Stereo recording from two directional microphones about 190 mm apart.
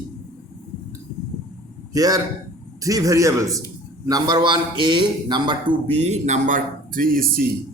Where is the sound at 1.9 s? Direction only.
20° right (ahead or behind).